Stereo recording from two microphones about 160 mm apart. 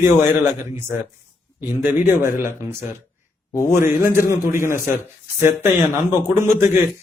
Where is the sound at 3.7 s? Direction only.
15° right (ahead or behind).